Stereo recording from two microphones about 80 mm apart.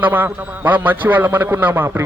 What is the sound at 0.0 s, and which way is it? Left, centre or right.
A man's voice, right.